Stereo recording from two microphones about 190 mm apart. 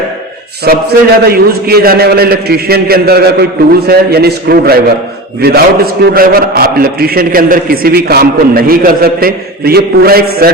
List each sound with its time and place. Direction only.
0.6 s a man's voice: 55° right (ahead or behind)